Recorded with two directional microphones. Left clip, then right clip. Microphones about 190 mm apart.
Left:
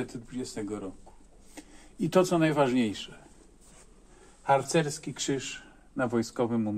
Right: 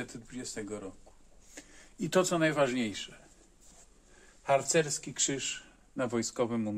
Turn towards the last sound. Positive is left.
turn(degrees=-15)  # may be behind; listen again after turning